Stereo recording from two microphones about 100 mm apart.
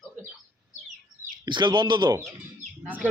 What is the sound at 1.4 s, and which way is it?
Speech, 50° right (ahead or behind).